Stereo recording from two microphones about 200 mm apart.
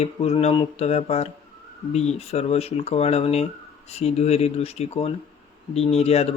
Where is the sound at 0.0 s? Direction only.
30° left (ahead or behind).